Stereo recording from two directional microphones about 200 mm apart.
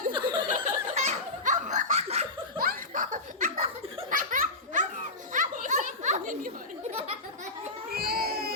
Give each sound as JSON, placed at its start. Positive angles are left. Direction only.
{"t": 0.1, "sound": "chuckle", "side_deg": -25}
{"t": 0.5, "sound": "laughter", "side_deg": -40}
{"t": 2.6, "sound": "laughter", "side_deg": -45}
{"t": 4.1, "sound": "baby laughter", "side_deg": -40}
{"t": 5.3, "sound": "a sound", "side_deg": -40}
{"t": 7.9, "sound": "baby cry", "side_deg": -50}